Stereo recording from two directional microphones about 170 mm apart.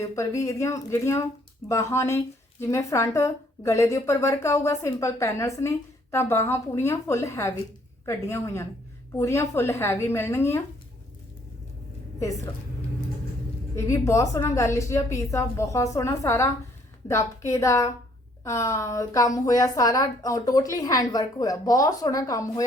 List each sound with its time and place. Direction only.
0.0 s speech: 20° left (ahead or behind)
13.7 s a woman's voice: 20° left (ahead or behind)